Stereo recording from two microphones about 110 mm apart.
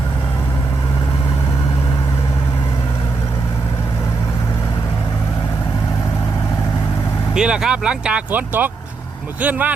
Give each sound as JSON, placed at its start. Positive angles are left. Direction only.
{"t": 7.3, "sound": "speech", "side_deg": -5}